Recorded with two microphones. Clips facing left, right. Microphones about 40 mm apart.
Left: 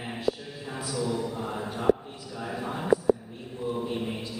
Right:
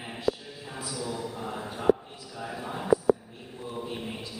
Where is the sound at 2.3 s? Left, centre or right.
Centre.